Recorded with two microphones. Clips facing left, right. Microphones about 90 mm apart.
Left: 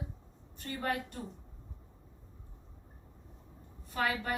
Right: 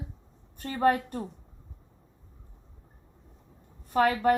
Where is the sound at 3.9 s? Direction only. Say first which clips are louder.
Right 10 dB; 50° right (ahead or behind).